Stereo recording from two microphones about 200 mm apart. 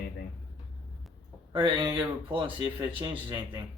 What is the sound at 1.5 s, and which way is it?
Speech, 25° right (ahead or behind).